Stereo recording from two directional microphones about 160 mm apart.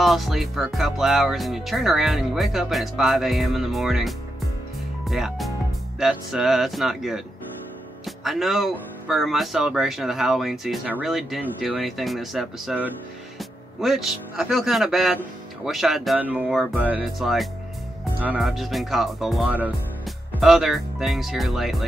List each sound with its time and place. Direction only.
0.0 s speech: centre (ahead or behind)